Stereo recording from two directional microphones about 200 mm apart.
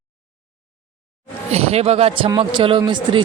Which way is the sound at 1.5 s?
30° right (ahead or behind).